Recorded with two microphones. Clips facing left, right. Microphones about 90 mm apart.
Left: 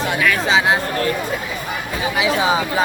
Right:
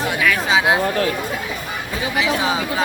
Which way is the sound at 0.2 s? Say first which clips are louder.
Left 1 dB; 5° right (ahead or behind).